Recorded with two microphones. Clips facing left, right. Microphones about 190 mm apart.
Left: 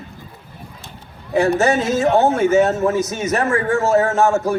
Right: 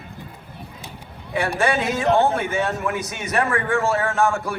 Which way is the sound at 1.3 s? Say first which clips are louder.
Left 6 dB; 40° left (ahead or behind).